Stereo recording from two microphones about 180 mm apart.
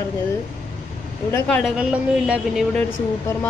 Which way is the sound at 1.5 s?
5° right (ahead or behind).